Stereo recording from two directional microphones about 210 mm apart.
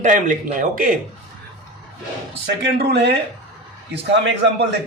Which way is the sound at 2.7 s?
50° right (ahead or behind).